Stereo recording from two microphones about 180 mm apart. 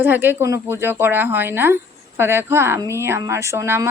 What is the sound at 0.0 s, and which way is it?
Speech, 10° right (ahead or behind).